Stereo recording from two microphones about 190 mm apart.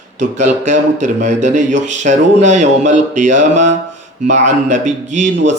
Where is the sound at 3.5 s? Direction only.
70° right (ahead or behind).